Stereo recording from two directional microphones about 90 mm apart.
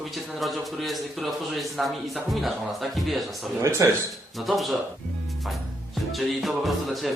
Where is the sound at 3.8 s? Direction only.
35° right (ahead or behind).